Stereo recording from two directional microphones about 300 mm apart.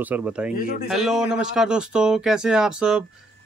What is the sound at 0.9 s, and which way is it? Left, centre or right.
Speech, centre.